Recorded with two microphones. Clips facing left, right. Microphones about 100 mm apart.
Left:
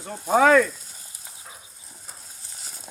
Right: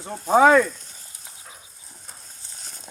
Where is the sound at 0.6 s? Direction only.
5° left (ahead or behind).